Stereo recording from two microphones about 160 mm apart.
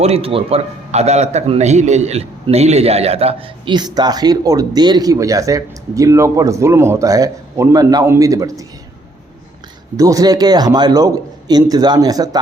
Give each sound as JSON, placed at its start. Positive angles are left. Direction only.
{"t": 0.0, "sound": "a man's voice", "side_deg": -40}
{"t": 10.0, "sound": "a man's voice", "side_deg": -20}